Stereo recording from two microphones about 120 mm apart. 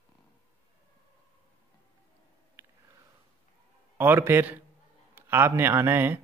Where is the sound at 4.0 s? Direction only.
20° right (ahead or behind).